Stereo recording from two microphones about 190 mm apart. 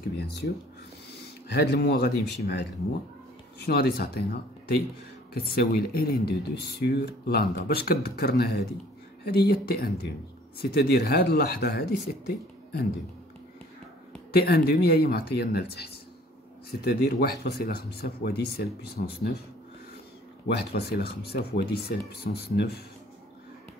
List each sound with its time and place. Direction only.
0.1 s speech: 65° left (ahead or behind)
1.5 s speech: 60° left (ahead or behind)
14.3 s speech: 55° left (ahead or behind)
17.0 s speech: 60° left (ahead or behind)
20.4 s speech: 60° left (ahead or behind)